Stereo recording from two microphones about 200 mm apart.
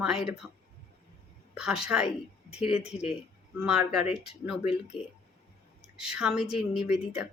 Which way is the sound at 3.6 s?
5° right (ahead or behind).